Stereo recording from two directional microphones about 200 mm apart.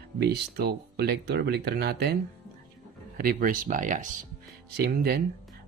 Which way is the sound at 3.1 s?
45° right (ahead or behind).